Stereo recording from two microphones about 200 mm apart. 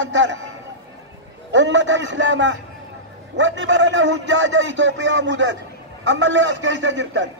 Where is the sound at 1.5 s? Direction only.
65° right (ahead or behind).